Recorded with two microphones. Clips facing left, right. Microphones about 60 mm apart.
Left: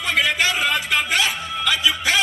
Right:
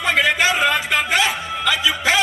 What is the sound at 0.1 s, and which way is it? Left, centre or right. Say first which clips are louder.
Music: right 3 dB; centre.